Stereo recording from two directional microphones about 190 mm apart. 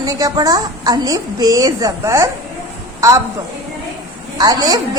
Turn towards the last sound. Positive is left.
turn(degrees=-20)  # may be behind; listen again after turning